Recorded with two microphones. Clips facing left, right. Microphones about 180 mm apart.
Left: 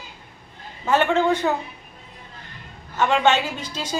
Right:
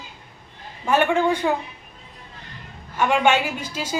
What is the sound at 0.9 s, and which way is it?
Speech, 10° right (ahead or behind).